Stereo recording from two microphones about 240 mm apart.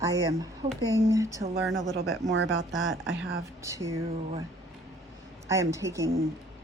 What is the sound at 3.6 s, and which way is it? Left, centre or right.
Speech, centre.